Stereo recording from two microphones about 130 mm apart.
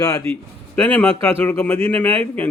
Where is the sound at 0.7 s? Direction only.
10° left (ahead or behind).